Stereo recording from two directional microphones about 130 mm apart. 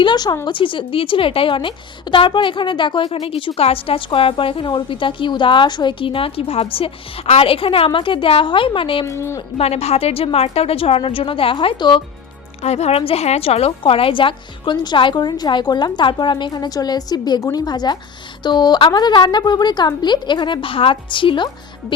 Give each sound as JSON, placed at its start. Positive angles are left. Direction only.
{"t": 0.0, "sound": "a woman's voice", "side_deg": 35}
{"t": 9.0, "sound": "a woman's voice", "side_deg": 20}
{"t": 9.6, "sound": "a woman's voice", "side_deg": 50}
{"t": 12.6, "sound": "a woman's voice", "side_deg": 55}